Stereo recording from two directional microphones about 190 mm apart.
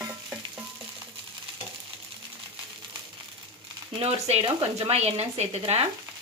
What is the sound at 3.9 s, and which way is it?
A woman's voice, 30° right (ahead or behind).